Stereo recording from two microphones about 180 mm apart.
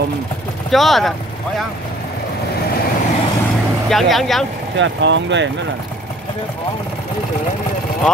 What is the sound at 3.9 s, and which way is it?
Speech, centre (ahead or behind).